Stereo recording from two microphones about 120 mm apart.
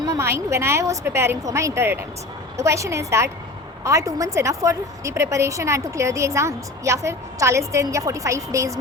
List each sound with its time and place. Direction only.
0.0 s a woman's voice: 25° right (ahead or behind)